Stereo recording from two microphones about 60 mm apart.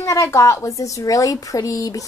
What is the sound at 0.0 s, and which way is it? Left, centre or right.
A woman's voice, left.